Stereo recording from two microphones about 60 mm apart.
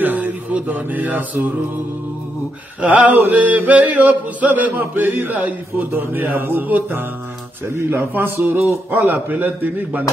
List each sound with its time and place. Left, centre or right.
0.0 s mantra: right
2.8 s chant: centre; by 6.6 s right
6.7 s speech: right